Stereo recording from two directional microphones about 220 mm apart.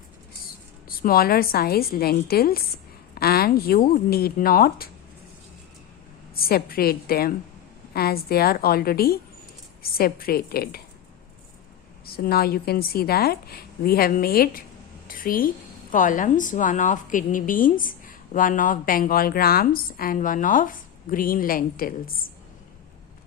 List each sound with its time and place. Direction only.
0.9 s a woman's voice: 40° left (ahead or behind)
6.3 s a woman's voice: 45° left (ahead or behind)
12.0 s a woman's voice: 45° left (ahead or behind)